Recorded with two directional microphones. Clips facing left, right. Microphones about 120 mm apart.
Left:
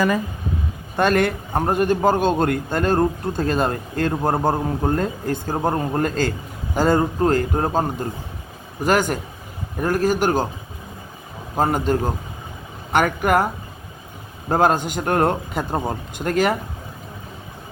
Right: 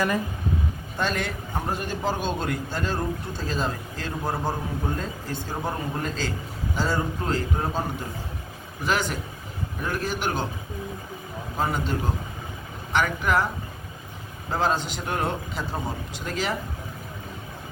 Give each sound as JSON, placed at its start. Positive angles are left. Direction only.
{"t": 0.9, "sound": "a man's voice", "side_deg": 60}
{"t": 11.5, "sound": "a man's voice", "side_deg": 45}
{"t": 14.5, "sound": "a man's voice", "side_deg": 50}